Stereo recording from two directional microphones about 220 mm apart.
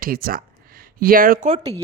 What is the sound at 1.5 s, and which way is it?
Speech, 20° right (ahead or behind).